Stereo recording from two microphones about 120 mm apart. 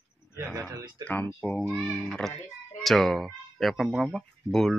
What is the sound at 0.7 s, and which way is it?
Speech, 35° right (ahead or behind).